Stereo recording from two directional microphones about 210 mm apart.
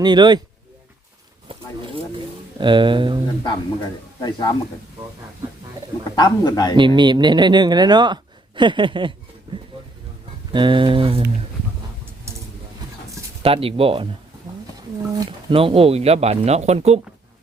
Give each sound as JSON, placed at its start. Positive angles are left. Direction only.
{"t": 0.0, "sound": "speech", "side_deg": -20}
{"t": 1.5, "sound": "speech", "side_deg": -25}
{"t": 4.2, "sound": "a man's voice", "side_deg": 20}
{"t": 6.1, "sound": "a man's voice", "side_deg": 20}
{"t": 6.7, "sound": "speech", "side_deg": -20}
{"t": 13.4, "sound": "speech", "side_deg": -25}
{"t": 15.1, "sound": "speech", "side_deg": -25}